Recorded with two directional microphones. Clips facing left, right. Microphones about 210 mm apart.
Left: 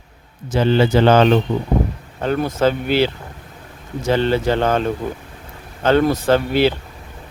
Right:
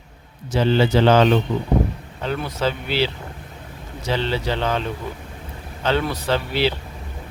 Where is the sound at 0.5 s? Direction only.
50° left (ahead or behind).